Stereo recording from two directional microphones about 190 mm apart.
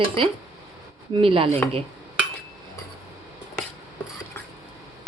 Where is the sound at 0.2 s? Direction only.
30° right (ahead or behind).